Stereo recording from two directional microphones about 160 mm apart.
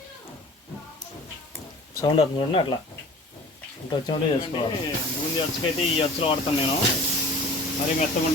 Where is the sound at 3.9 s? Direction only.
30° left (ahead or behind).